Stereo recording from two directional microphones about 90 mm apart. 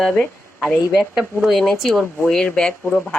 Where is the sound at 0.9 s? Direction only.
5° right (ahead or behind).